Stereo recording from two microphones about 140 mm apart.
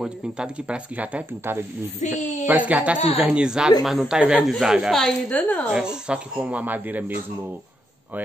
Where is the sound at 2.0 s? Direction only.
60° left (ahead or behind).